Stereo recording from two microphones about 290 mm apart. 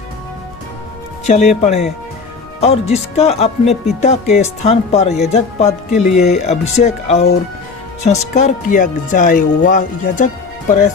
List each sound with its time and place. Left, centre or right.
1.3 s speech: left